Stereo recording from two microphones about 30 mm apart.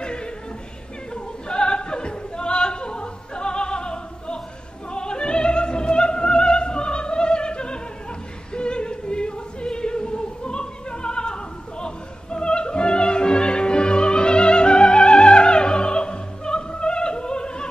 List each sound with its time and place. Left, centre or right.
0.0 s music: left
1.1 s a sound: left
4.9 s opera: left
8.5 s music: left